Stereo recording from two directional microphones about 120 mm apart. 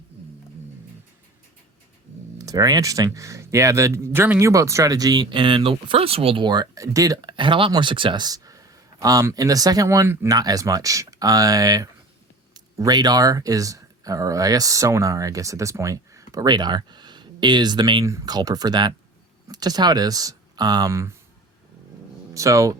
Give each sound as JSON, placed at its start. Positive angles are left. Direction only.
{"t": 2.4, "sound": "speech", "side_deg": -30}
{"t": 22.4, "sound": "speech", "side_deg": -25}